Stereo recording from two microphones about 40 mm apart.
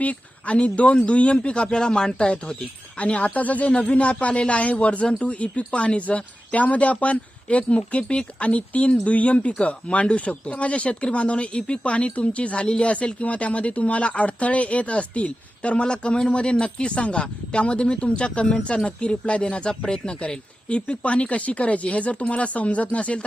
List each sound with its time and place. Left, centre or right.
0.0 s a man's voice: left
1.6 s a man's voice: centre; by 23.2 s left